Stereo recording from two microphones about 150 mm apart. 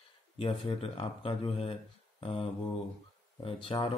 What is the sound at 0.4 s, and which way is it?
Speech, 40° left (ahead or behind).